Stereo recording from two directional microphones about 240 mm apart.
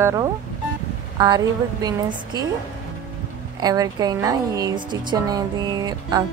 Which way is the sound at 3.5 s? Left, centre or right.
Centre.